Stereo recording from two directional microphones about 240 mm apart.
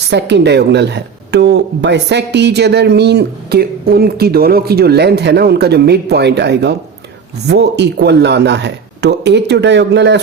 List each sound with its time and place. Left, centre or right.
0.1 s speech: right